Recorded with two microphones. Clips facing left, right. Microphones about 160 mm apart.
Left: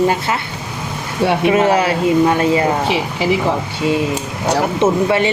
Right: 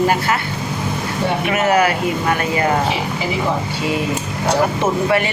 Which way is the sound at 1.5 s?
25° left (ahead or behind).